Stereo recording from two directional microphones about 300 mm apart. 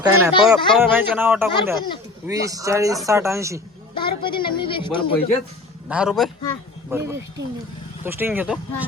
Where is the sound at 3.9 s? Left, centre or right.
Centre.